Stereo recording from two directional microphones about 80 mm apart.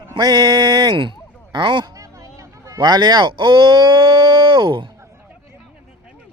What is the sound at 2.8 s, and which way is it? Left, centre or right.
Speech, right.